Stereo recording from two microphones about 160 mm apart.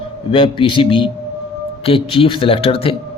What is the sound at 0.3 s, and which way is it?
A man's voice, 30° left (ahead or behind).